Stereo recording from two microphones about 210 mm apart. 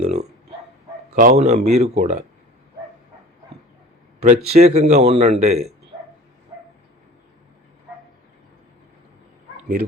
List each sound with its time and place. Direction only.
0.0 s dog: 30° right (ahead or behind)
1.1 s a man's voice: 35° right (ahead or behind)
4.2 s a man's voice: 30° right (ahead or behind)